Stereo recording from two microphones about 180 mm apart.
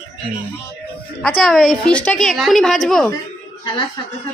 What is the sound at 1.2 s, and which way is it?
A woman's voice, 5° left (ahead or behind).